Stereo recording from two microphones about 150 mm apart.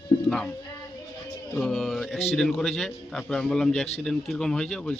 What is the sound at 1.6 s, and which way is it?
A man's voice, centre (ahead or behind).